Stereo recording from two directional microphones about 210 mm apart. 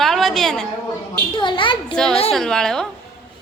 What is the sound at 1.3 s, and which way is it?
Speech, 20° left (ahead or behind).